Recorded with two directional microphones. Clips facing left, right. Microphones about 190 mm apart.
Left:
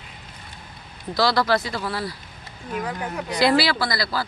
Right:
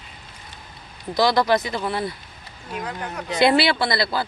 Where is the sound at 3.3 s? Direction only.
25° right (ahead or behind).